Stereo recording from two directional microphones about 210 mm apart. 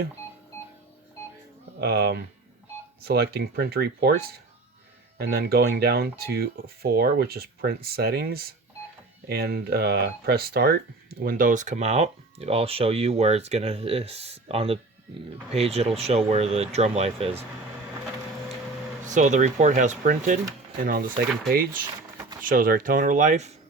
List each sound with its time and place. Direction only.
1.8 s speech: 50° right (ahead or behind); by 17.4 s 30° right (ahead or behind)
19.0 s speech: 35° right (ahead or behind)
21.5 s speech: 45° right (ahead or behind)